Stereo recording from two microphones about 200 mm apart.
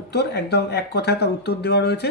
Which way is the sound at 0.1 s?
55° left (ahead or behind).